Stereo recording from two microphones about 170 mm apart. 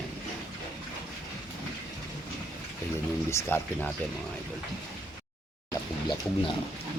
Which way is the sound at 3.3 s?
15° left (ahead or behind).